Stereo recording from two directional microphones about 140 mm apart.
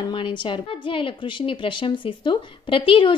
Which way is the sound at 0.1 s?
35° left (ahead or behind).